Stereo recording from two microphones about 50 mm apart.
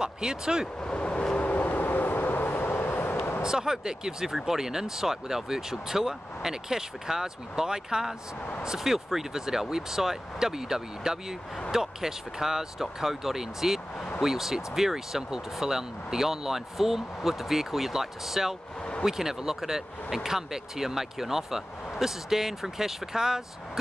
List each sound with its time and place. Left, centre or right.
0.0 s speech: centre
0.7 s vehicle: left
1.3 s vehicle: left
3.4 s speech: centre